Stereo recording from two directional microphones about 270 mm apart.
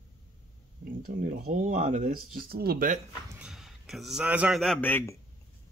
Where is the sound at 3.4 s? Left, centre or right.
Centre.